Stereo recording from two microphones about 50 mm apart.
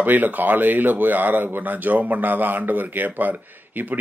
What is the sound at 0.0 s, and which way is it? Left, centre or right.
Speech, right.